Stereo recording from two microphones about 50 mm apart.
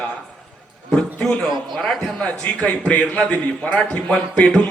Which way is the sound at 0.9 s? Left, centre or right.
Centre.